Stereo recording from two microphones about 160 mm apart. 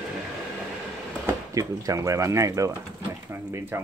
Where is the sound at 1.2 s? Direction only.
20° right (ahead or behind).